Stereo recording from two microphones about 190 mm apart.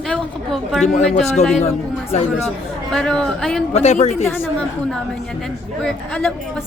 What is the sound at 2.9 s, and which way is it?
Speech, 5° left (ahead or behind).